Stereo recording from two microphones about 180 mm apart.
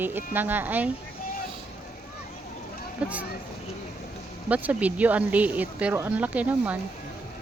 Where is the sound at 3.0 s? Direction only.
5° right (ahead or behind).